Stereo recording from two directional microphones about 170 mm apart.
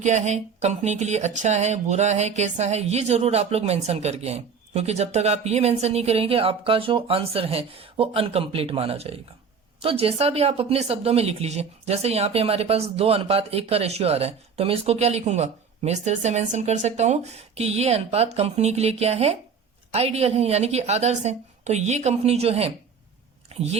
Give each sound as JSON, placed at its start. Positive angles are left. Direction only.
{"t": 0.0, "sound": "a woman's voice", "side_deg": -45}
{"t": 23.5, "sound": "chewing", "side_deg": -35}